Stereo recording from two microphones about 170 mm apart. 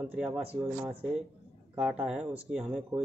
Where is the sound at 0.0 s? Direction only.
5° right (ahead or behind).